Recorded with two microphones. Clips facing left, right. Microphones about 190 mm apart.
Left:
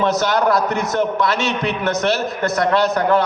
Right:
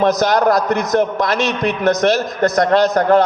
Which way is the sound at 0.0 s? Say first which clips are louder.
Right 3 dB; 40° right (ahead or behind).